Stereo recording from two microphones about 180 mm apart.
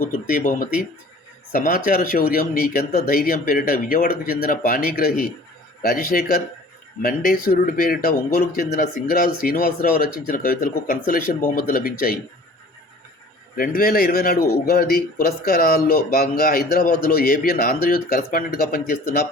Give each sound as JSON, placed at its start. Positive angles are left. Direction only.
{"t": 0.3, "sound": "speech", "side_deg": 50}
{"t": 13.6, "sound": "speech", "side_deg": 55}